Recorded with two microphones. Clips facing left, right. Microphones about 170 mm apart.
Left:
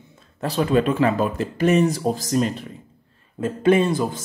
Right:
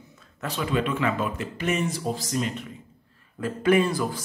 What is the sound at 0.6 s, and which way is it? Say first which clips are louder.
Speech: left 7 dB; 40° left (ahead or behind).